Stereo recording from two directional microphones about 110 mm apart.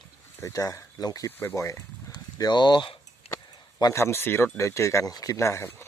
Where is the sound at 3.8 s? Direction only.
25° left (ahead or behind).